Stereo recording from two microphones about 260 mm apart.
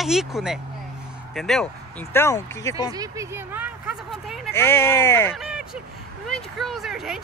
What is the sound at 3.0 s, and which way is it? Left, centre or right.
Speech, centre.